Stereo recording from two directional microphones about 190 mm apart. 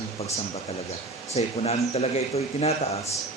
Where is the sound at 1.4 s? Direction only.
35° left (ahead or behind).